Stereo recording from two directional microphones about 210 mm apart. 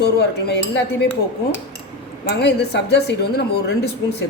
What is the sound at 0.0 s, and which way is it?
Speech, 50° left (ahead or behind).